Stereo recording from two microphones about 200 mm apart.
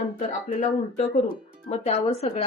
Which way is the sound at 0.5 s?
30° left (ahead or behind).